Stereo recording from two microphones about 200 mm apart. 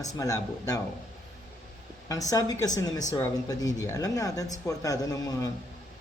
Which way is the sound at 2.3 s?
20° left (ahead or behind).